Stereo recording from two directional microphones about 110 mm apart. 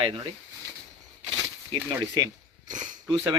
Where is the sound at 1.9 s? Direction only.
35° right (ahead or behind).